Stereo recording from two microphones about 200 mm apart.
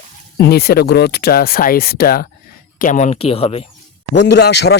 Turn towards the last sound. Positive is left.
turn(degrees=55)  # may be behind; listen again after turning